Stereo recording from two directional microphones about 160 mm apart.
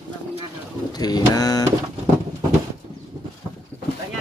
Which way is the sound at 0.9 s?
25° left (ahead or behind).